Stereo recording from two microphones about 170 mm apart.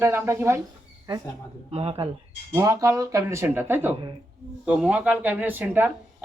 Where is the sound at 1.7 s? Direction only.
35° right (ahead or behind).